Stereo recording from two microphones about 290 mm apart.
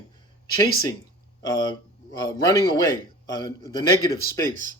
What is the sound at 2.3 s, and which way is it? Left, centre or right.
Speech, centre.